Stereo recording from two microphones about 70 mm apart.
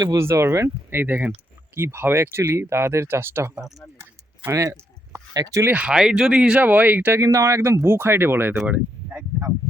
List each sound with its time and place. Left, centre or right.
0.2 s speech: right
1.7 s speech: right
3.5 s speech: centre
4.5 s a sound: right
5.3 s speech: right
5.7 s speech: centre
6.6 s speech: right
7.2 s speech: right
8.5 s speech: right